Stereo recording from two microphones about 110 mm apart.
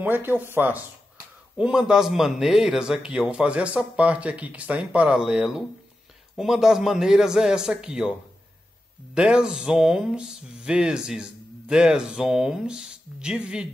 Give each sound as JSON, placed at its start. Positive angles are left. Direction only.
{"t": 0.0, "sound": "speech", "side_deg": -15}
{"t": 1.6, "sound": "a man's voice", "side_deg": -5}
{"t": 9.1, "sound": "speech", "side_deg": -10}